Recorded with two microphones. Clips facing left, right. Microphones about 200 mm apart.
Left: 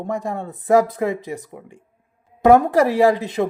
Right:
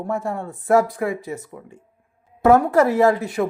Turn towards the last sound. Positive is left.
turn(degrees=20)  # may be behind; listen again after turning